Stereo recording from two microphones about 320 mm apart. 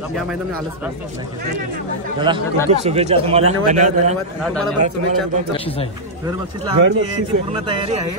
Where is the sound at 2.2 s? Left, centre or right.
Centre.